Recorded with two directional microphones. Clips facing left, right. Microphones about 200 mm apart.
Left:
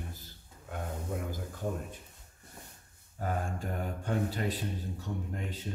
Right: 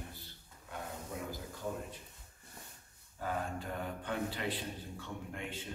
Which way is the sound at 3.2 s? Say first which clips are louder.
Left 3 dB; 45° left (ahead or behind).